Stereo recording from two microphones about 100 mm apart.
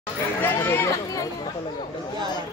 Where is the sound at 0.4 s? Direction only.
25° left (ahead or behind).